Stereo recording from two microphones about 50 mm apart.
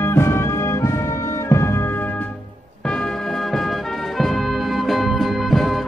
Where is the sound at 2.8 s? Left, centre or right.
Centre.